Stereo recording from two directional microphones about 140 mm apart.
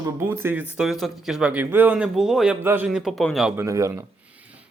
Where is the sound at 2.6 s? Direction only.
15° right (ahead or behind).